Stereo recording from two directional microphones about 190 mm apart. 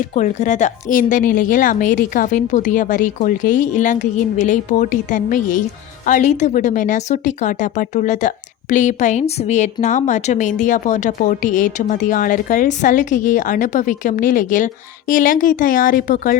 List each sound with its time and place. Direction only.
0.1 s a woman's voice: 40° left (ahead or behind)